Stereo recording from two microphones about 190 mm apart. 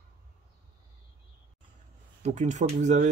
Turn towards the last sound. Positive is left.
turn(degrees=-40)  # may be behind; listen again after turning